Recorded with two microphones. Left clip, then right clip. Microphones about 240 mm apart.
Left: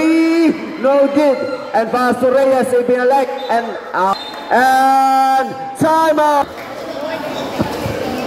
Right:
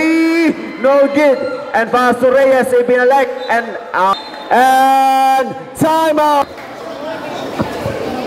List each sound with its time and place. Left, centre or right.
0.0 s a man's voice: centre
4.5 s a man's voice: right